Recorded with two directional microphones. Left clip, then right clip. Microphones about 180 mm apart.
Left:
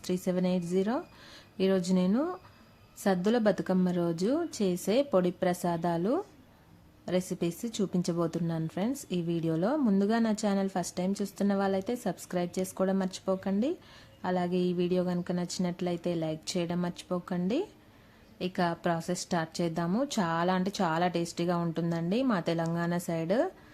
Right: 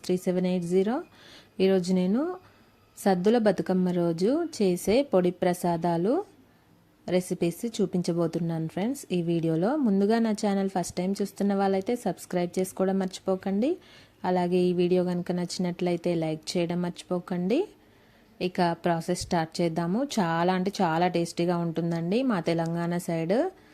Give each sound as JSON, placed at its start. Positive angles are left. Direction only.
{"t": 0.0, "sound": "a woman's voice", "side_deg": -20}